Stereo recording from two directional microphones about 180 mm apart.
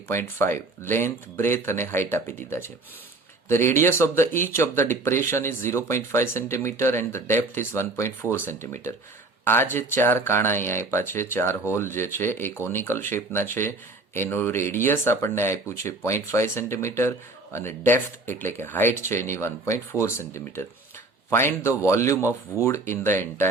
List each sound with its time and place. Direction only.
0.1 s speech: 15° left (ahead or behind)